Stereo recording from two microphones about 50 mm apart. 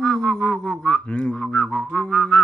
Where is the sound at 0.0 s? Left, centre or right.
Centre.